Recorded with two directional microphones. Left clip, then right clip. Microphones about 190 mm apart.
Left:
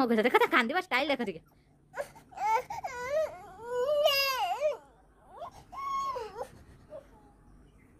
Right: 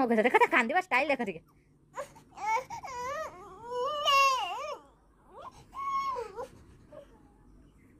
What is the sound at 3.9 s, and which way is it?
Baby cry, 45° left (ahead or behind).